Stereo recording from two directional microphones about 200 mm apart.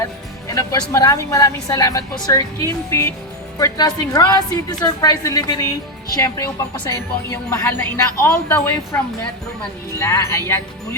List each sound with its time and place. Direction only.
0.0 s speech: 15° left (ahead or behind)
10.0 s speech: 15° left (ahead or behind)